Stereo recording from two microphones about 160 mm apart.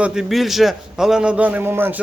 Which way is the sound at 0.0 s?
5° right (ahead or behind).